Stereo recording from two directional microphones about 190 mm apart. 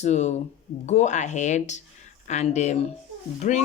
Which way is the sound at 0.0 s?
35° left (ahead or behind).